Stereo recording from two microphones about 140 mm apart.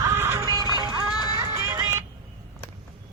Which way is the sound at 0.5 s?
30° right (ahead or behind).